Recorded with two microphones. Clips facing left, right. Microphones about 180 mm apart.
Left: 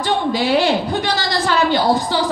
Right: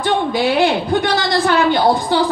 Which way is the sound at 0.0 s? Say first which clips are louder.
Right 2 dB; 55° right (ahead or behind).